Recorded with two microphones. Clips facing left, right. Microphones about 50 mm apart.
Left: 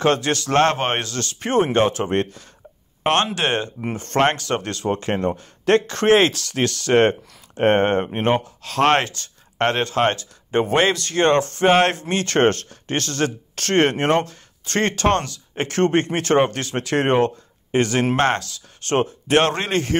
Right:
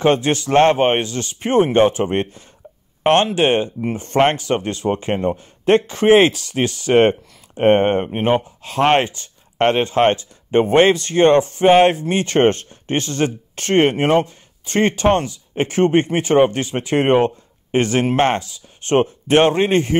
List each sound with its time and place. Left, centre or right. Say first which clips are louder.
0.0 s speech: right 3 dB; centre
3.0 s a sound: right 4 dB; right
3.3 s speech: right 6 dB; centre